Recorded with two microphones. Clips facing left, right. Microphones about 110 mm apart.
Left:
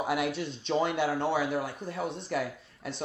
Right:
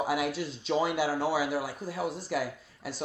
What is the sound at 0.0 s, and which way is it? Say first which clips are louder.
Speech: even; centre (ahead or behind).